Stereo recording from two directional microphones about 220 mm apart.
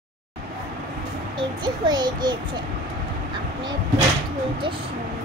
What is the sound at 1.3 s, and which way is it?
A child's voice, 20° right (ahead or behind).